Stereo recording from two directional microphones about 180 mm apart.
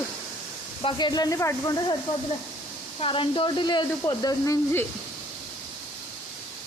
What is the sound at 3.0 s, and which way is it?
Speech, 30° left (ahead or behind).